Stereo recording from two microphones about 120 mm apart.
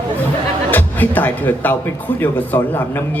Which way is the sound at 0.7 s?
15° left (ahead or behind).